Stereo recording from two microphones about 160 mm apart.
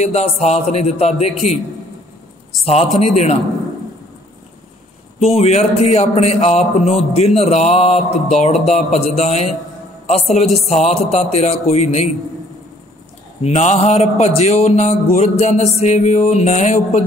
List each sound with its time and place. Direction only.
0.0 s speech: 40° left (ahead or behind)
2.6 s a man's voice: 40° left (ahead or behind)
5.3 s a man's voice: 45° left (ahead or behind)
13.4 s a man's voice: 45° left (ahead or behind)